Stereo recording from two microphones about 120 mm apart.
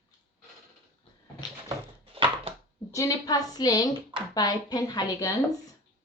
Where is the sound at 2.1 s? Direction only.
55° right (ahead or behind).